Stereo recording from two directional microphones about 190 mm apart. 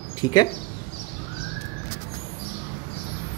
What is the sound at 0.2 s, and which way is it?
Speech, 20° left (ahead or behind).